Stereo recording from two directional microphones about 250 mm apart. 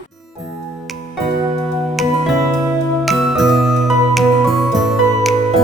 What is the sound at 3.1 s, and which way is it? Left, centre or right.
Music, centre.